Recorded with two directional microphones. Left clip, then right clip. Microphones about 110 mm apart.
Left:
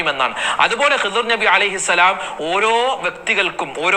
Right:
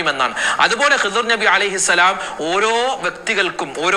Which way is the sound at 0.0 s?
55° right (ahead or behind).